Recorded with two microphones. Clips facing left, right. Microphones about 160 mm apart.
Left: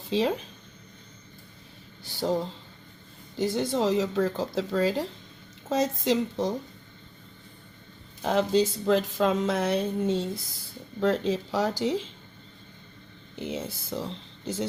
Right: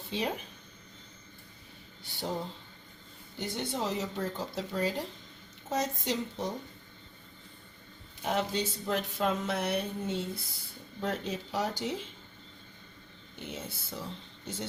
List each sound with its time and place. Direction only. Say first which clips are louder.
0.1 s speech: left 9 dB; 90° left
2.0 s speech: left 8 dB; 90° left
3.3 s speech: left 9 dB; 90° left
8.2 s speech: left 8 dB; 90° left
13.3 s speech: left 8 dB; 90° left